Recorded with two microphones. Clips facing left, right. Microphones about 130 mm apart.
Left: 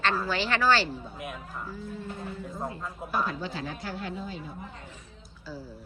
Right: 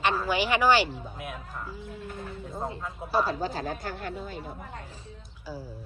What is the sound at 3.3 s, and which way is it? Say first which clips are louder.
A woman's voice: right 4 dB; 40° right (ahead or behind).